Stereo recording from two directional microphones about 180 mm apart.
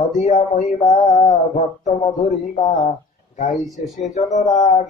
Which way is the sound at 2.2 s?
40° left (ahead or behind).